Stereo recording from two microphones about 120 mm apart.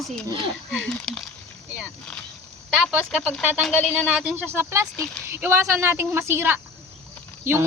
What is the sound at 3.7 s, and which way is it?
Speech, 15° left (ahead or behind).